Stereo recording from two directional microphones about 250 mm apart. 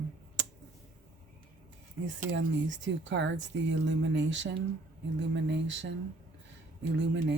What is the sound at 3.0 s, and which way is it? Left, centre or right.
Speech, right.